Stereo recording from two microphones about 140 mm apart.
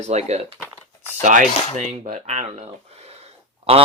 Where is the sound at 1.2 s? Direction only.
60° right (ahead or behind).